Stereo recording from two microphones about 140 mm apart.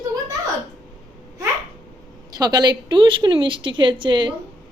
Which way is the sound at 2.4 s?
30° right (ahead or behind).